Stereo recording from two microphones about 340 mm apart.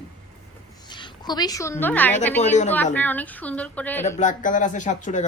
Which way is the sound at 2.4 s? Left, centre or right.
Centre.